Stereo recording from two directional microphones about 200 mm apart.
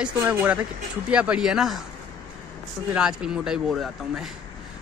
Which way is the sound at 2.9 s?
5° right (ahead or behind).